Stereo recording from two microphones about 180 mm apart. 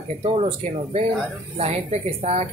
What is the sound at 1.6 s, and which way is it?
Speech, 35° right (ahead or behind).